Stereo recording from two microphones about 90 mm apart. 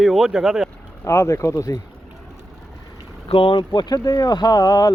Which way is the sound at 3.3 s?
75° left (ahead or behind).